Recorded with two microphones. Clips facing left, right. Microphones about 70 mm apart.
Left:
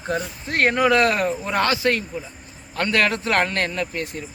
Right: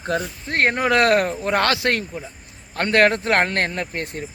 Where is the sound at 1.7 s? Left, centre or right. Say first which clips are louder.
Even; right.